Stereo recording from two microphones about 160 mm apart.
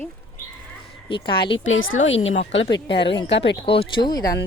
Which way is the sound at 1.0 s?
30° left (ahead or behind).